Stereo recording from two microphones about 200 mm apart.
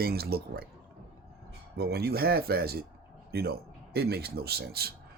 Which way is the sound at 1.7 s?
50° right (ahead or behind).